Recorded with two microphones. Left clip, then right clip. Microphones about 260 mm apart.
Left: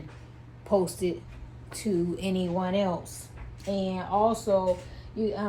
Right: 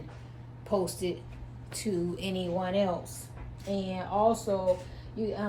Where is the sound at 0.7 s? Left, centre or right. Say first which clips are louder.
Left 4 dB; left.